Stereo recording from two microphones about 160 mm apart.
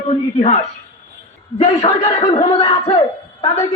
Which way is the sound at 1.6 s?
35° left (ahead or behind).